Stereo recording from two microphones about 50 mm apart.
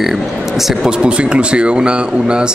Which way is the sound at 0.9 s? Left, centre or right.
Right.